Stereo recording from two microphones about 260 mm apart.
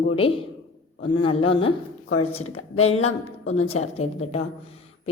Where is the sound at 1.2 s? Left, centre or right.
Left.